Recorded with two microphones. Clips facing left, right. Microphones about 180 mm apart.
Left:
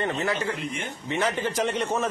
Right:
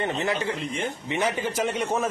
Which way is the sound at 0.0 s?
20° right (ahead or behind).